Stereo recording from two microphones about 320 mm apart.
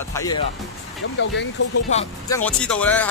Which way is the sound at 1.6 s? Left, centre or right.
Left.